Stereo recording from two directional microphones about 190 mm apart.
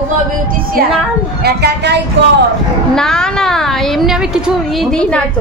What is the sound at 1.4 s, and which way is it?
Speech, 60° right (ahead or behind).